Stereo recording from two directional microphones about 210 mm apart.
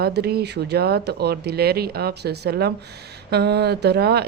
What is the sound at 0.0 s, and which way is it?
Speech, 50° right (ahead or behind).